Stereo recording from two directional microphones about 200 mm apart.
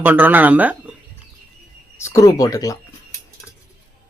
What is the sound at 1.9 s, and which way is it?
Speech, 15° left (ahead or behind).